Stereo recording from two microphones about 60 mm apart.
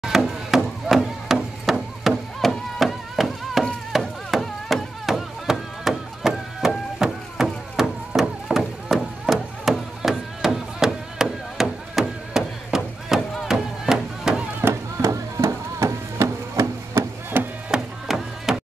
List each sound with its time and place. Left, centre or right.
0.0 s chop: centre
3.9 s a sound: centre
4.3 s music: centre
7.0 s chop: centre
8.2 s a sound: centre
14.7 s music: right
17.3 s chop: right
17.6 s music: centre